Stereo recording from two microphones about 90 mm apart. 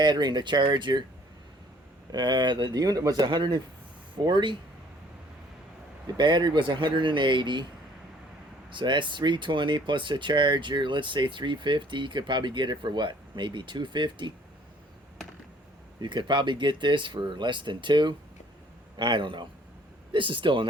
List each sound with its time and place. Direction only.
0.0 s speech: 55° right (ahead or behind)
2.1 s speech: 55° right (ahead or behind)
6.1 s speech: 60° right (ahead or behind)
8.7 s speech: 60° right (ahead or behind)
16.0 s speech: 55° right (ahead or behind)